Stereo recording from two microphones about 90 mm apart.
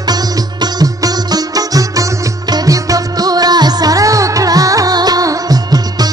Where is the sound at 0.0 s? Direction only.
50° right (ahead or behind).